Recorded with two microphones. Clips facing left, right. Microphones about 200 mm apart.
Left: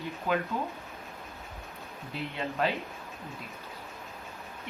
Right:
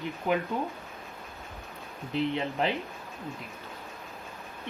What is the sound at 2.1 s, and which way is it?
Speech, 20° right (ahead or behind).